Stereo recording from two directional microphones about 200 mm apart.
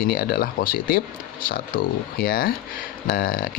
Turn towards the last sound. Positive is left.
turn(degrees=45)  # may be behind; listen again after turning